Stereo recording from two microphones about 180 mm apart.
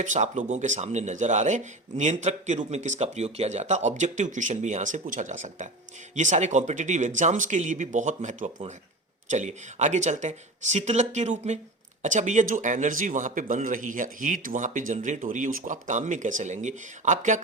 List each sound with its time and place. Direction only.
0.0 s a man's voice: 45° right (ahead or behind)